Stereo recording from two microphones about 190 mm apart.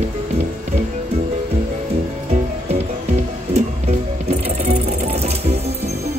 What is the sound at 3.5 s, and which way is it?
Sewing machine, 35° right (ahead or behind).